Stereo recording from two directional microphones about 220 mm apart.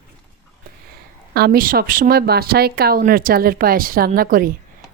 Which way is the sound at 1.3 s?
45° right (ahead or behind).